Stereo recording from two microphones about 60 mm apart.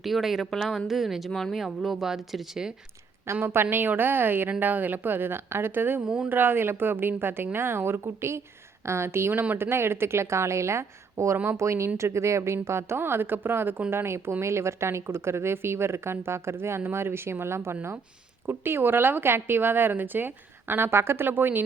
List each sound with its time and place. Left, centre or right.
0.0 s speech: centre
0.9 s speech: centre
1.3 s speech: centre
3.4 s a woman's voice: right
6.0 s speech: centre
6.2 s a woman's voice: right
9.3 s speech: right
9.6 s a woman's voice: right